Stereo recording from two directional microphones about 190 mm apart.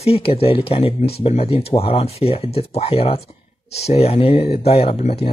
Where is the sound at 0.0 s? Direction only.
30° left (ahead or behind).